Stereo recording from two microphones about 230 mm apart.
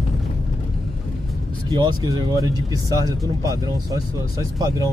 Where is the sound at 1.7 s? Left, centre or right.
Centre.